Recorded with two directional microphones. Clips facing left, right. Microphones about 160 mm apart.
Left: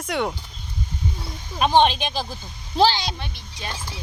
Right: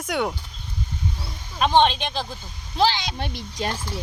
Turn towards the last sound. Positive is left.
turn(degrees=-60)  # may be behind; listen again after turning